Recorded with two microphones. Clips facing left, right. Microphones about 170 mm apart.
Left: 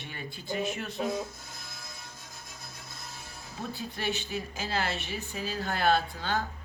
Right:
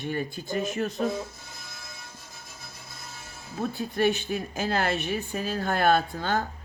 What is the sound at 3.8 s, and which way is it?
Speech, 50° right (ahead or behind).